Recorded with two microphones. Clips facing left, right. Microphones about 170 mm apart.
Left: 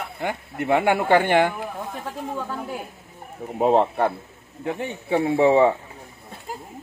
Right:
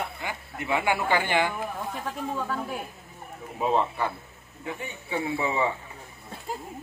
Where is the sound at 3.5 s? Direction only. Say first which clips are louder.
Left 7 dB; 60° left (ahead or behind).